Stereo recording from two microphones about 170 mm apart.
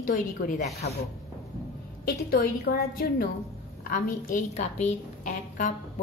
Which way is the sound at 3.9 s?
50° left (ahead or behind).